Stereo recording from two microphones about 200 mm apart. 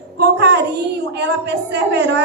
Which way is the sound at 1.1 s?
55° right (ahead or behind).